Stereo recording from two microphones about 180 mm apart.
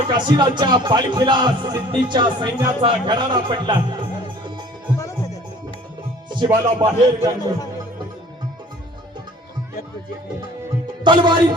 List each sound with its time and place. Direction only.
0.1 s speech: 25° right (ahead or behind)
6.2 s music: 25° right (ahead or behind)
6.8 s a man's voice: 20° right (ahead or behind)
11.0 s music: 25° right (ahead or behind)